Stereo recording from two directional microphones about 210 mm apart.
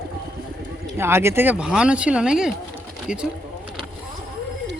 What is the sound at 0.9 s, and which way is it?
Speech, 10° right (ahead or behind).